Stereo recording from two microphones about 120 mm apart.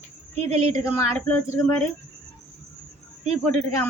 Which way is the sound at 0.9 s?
20° left (ahead or behind).